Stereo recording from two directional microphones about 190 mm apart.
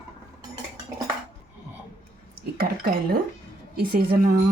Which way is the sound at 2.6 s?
55° right (ahead or behind).